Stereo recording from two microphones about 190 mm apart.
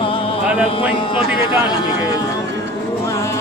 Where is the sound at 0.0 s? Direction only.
30° left (ahead or behind).